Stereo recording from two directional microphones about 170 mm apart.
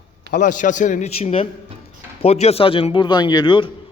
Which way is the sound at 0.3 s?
50° left (ahead or behind).